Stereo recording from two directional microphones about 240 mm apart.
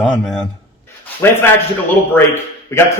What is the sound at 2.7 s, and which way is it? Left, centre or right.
Speech, centre.